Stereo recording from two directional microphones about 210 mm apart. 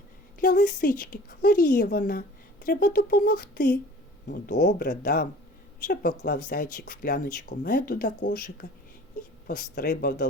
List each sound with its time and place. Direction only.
0.3 s a woman's voice: 40° left (ahead or behind)